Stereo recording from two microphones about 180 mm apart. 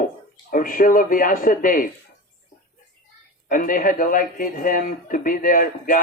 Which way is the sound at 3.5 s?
50° left (ahead or behind).